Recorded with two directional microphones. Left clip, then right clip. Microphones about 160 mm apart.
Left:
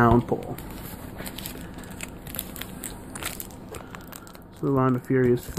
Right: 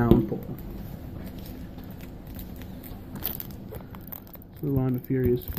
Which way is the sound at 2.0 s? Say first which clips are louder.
Left 6 dB; 65° left (ahead or behind).